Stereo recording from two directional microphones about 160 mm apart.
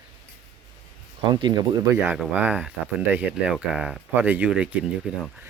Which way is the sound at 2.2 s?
10° right (ahead or behind).